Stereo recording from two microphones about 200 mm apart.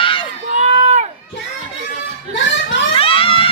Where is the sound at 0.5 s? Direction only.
35° right (ahead or behind).